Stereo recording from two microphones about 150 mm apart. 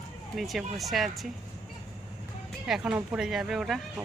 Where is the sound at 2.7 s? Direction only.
5° right (ahead or behind).